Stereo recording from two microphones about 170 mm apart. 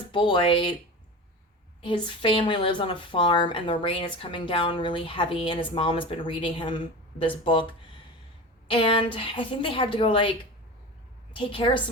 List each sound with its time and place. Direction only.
0.1 s a woman's voice: 30° left (ahead or behind)
1.8 s a woman's voice: 30° left (ahead or behind)
8.7 s a woman's voice: 30° left (ahead or behind)
11.3 s a woman's voice: 30° left (ahead or behind)